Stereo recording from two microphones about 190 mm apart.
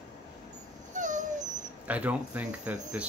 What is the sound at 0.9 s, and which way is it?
Dog, 40° right (ahead or behind).